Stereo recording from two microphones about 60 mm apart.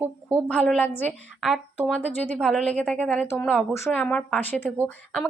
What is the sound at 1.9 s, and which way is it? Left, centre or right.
A woman's voice, left.